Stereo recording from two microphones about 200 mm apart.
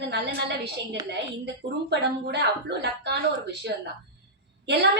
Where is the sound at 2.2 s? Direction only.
55° right (ahead or behind).